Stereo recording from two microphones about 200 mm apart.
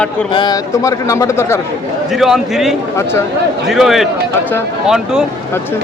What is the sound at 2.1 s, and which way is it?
A man's voice, centre (ahead or behind).